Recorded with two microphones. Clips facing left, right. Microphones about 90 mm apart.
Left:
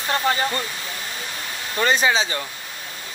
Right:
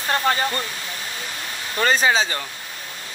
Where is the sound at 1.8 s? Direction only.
40° right (ahead or behind).